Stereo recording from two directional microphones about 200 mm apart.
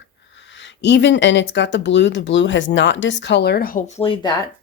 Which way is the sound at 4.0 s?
25° left (ahead or behind).